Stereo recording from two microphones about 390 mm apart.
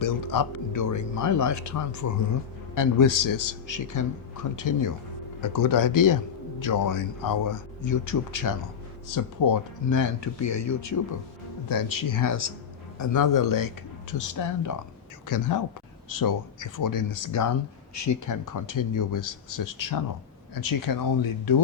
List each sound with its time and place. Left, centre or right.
0.0 s speech: left
11.7 s speech: left